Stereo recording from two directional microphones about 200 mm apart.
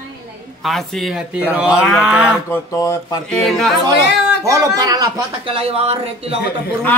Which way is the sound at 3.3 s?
Centre (ahead or behind).